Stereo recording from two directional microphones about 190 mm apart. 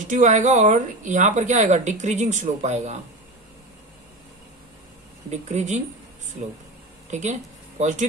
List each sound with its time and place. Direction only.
0.1 s speech: 40° right (ahead or behind)
5.3 s speech: 40° right (ahead or behind)
7.1 s speech: 40° right (ahead or behind)